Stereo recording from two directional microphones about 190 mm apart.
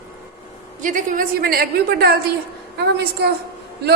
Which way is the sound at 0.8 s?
45° right (ahead or behind).